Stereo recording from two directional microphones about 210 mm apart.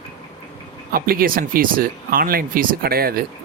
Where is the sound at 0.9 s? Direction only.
45° right (ahead or behind).